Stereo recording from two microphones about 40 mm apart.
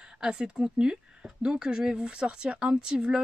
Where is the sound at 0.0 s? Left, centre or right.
Right.